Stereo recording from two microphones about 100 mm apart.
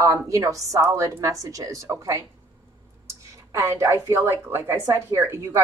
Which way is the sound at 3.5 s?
30° right (ahead or behind).